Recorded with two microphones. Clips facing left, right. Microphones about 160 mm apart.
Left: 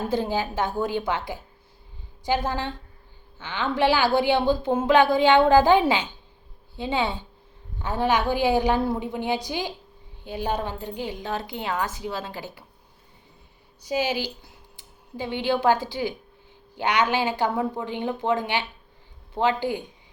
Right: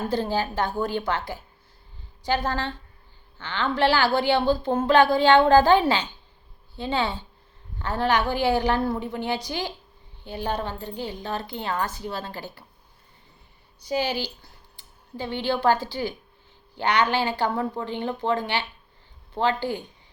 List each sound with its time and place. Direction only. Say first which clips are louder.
0.1 s speech: even; 15° left (ahead or behind)
2.4 s speech: even; 10° left (ahead or behind)
13.8 s speech: left 1 dB; 5° left (ahead or behind)